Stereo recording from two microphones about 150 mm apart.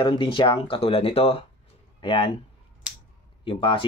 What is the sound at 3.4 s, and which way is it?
Speech, 35° left (ahead or behind).